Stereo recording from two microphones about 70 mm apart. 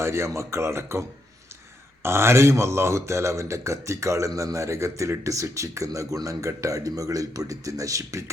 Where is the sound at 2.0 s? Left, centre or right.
Right.